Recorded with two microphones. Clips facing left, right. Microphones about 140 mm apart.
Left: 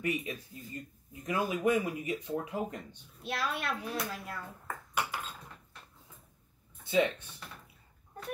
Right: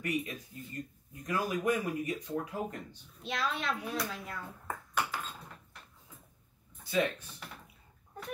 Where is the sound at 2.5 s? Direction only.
10° left (ahead or behind).